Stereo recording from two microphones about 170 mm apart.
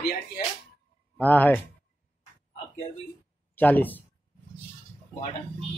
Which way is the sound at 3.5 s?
10° left (ahead or behind).